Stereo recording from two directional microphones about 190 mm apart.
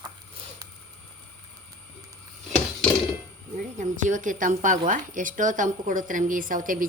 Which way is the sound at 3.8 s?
40° right (ahead or behind).